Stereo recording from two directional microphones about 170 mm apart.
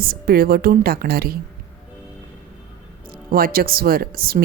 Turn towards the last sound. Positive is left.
turn(degrees=-60)  # may be behind; listen again after turning